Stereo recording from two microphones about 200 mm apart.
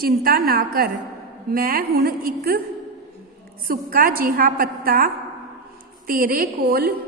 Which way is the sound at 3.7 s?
45° right (ahead or behind).